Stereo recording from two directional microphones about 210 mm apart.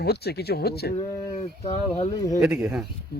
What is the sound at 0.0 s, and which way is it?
Speech, 50° left (ahead or behind).